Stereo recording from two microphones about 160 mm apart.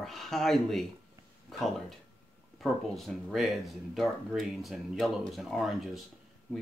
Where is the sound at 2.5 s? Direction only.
Centre (ahead or behind).